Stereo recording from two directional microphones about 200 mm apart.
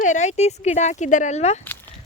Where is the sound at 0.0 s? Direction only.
35° left (ahead or behind).